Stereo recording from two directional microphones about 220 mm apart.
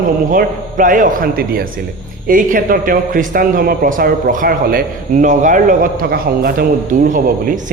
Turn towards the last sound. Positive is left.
turn(degrees=-40)  # may be behind; listen again after turning